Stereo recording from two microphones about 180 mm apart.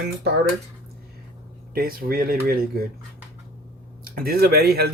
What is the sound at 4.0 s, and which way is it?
Speech, 55° right (ahead or behind).